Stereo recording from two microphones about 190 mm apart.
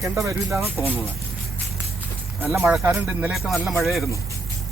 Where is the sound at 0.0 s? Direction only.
15° right (ahead or behind).